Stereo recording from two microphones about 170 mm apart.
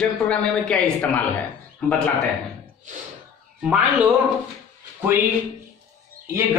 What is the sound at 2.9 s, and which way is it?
Snort, 50° right (ahead or behind).